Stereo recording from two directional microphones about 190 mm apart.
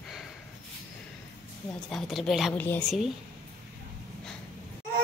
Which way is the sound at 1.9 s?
Centre (ahead or behind).